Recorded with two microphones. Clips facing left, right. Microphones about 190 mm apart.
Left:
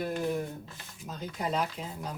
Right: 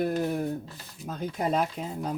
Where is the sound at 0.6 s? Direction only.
35° right (ahead or behind).